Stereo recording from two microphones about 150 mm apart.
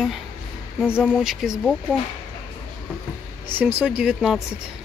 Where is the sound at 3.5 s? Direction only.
15° right (ahead or behind).